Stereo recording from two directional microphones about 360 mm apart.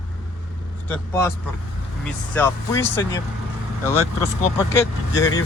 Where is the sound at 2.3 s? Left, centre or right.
Centre.